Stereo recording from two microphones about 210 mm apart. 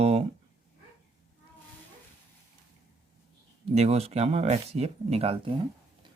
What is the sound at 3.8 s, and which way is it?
Speech, 30° right (ahead or behind).